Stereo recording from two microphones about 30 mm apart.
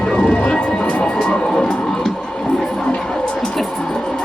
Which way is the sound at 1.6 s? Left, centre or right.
Left.